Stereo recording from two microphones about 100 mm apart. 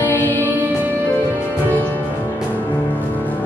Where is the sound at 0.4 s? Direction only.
15° right (ahead or behind).